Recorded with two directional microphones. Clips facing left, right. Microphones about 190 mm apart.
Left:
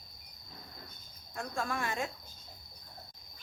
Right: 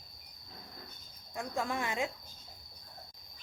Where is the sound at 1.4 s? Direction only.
20° right (ahead or behind).